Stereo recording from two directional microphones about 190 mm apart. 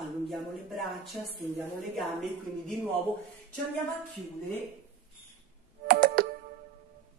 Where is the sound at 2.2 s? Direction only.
5° left (ahead or behind).